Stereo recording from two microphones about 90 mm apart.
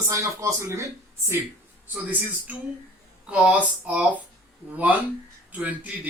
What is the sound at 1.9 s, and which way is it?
Speech, 15° right (ahead or behind).